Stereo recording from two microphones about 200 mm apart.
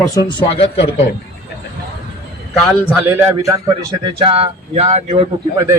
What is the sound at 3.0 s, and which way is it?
Speech, 10° right (ahead or behind).